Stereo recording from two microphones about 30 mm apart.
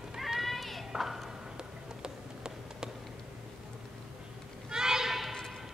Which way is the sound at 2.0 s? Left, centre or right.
Right.